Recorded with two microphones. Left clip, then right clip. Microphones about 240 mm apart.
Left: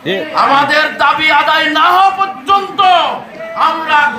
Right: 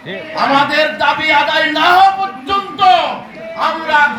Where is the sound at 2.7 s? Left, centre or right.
Centre.